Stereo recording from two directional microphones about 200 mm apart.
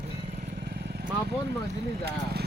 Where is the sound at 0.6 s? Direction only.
55° right (ahead or behind).